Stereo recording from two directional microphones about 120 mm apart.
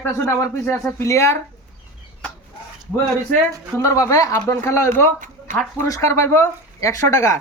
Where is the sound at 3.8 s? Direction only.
25° left (ahead or behind).